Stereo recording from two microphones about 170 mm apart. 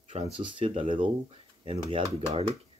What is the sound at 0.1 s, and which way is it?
Speech, 35° right (ahead or behind).